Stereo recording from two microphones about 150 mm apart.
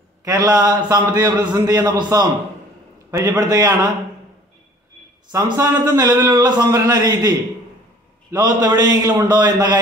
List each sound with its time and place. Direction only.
0.2 s a man's voice: 25° right (ahead or behind)
5.3 s a man's voice: 25° right (ahead or behind)